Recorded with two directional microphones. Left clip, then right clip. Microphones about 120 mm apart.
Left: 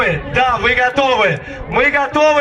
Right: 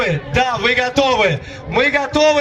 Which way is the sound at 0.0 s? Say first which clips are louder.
Left 3 dB; 40° right (ahead or behind).